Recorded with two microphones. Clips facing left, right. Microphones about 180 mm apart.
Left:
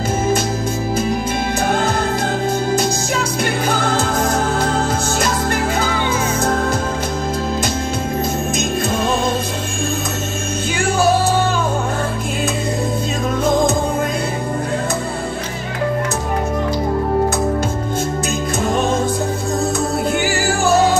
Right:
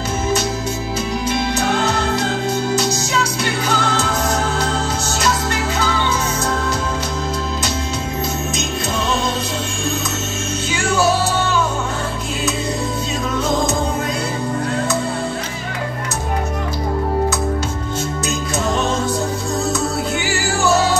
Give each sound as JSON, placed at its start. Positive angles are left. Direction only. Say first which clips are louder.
{"t": 1.7, "sound": "music", "louder": "left 2 dB", "side_deg": 50}
{"t": 5.8, "sound": "music", "louder": "left 1 dB", "side_deg": 50}